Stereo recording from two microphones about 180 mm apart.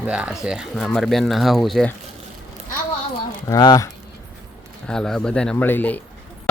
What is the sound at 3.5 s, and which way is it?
Speech, 20° left (ahead or behind).